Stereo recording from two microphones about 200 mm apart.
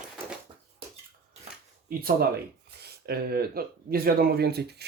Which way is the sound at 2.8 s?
50° right (ahead or behind).